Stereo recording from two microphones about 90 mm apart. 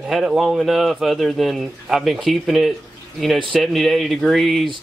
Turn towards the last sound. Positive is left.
turn(degrees=0)  # may be behind; listen again after turning